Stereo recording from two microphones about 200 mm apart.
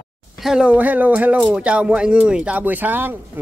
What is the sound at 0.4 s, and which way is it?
Speech, 5° right (ahead or behind).